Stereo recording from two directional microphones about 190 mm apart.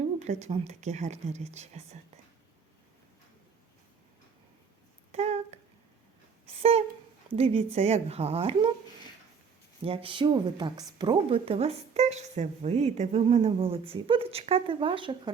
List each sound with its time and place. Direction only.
0.3 s speech: 35° right (ahead or behind)
5.1 s a sound: 35° right (ahead or behind)
7.3 s speech: 30° right (ahead or behind)
9.8 s a woman's voice: 30° right (ahead or behind)